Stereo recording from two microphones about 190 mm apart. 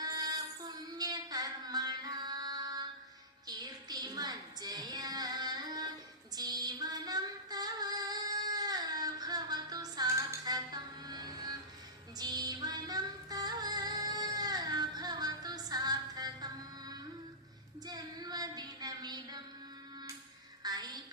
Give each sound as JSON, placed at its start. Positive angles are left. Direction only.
{"t": 0.0, "sound": "child singing", "side_deg": -20}
{"t": 3.4, "sound": "a sound", "side_deg": -20}
{"t": 6.3, "sound": "female singing", "side_deg": -20}
{"t": 12.1, "sound": "music", "side_deg": -20}
{"t": 17.8, "sound": "a sound", "side_deg": -20}
{"t": 20.6, "sound": "music", "side_deg": -20}